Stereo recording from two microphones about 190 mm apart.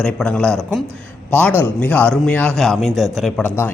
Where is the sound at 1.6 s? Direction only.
10° left (ahead or behind).